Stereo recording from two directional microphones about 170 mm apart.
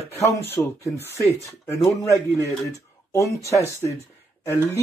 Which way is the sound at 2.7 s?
15° left (ahead or behind).